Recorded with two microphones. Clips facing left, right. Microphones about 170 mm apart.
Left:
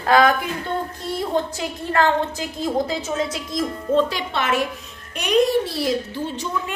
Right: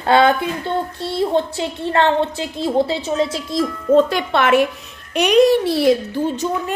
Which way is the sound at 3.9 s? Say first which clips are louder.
Right 6 dB; 55° right (ahead or behind).